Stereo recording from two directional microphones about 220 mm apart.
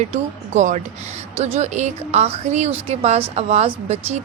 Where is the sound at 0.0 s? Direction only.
30° right (ahead or behind).